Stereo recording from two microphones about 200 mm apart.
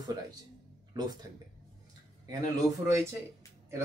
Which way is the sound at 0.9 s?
20° right (ahead or behind).